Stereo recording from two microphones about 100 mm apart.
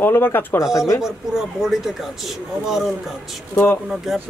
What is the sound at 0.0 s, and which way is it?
Speech, 20° left (ahead or behind).